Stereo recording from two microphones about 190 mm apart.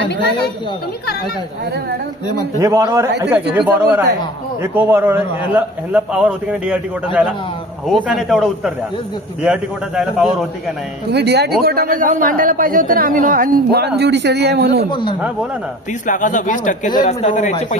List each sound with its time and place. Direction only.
0.0 s a woman's voice: 65° left (ahead or behind)
2.6 s a man's voice: 15° right (ahead or behind)
7.8 s a man's voice: centre (ahead or behind)
11.1 s a woman's voice: 60° right (ahead or behind)
14.9 s speech: 25° left (ahead or behind)
16.1 s speech: 40° left (ahead or behind)